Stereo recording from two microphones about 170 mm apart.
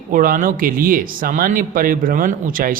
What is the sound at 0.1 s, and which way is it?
Speech, 55° right (ahead or behind).